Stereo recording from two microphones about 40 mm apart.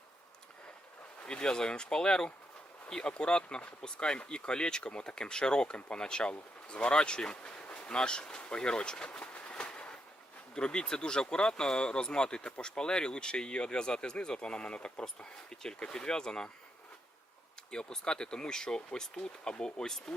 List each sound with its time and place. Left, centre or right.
1.3 s speech: centre
9.1 s train: left
10.5 s speech: left
17.7 s speech: centre